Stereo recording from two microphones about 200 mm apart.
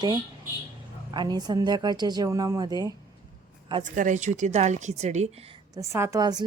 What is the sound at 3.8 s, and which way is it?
A woman's voice, 40° right (ahead or behind).